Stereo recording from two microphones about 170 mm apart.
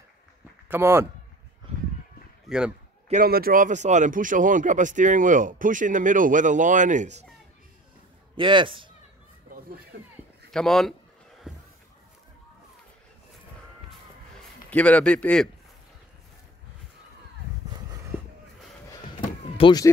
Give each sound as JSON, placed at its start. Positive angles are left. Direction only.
{"t": 0.7, "sound": "speech", "side_deg": -15}
{"t": 2.4, "sound": "speech", "side_deg": -5}
{"t": 3.1, "sound": "speech", "side_deg": -60}
{"t": 8.4, "sound": "speech", "side_deg": -30}
{"t": 10.5, "sound": "speech", "side_deg": 5}
{"t": 14.7, "sound": "a man's voice", "side_deg": 10}
{"t": 19.5, "sound": "slam", "side_deg": 30}